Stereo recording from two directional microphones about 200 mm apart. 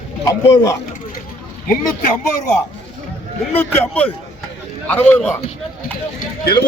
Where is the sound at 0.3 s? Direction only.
15° left (ahead or behind).